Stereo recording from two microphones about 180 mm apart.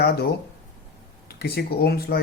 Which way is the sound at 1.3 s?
60° left (ahead or behind).